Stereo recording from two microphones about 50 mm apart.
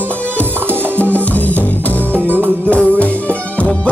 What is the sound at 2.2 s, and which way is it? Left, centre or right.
Music, right.